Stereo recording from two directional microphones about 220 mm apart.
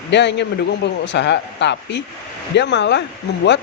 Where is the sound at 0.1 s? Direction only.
50° left (ahead or behind).